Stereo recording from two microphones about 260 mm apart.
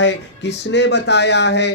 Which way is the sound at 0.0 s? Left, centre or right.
Left.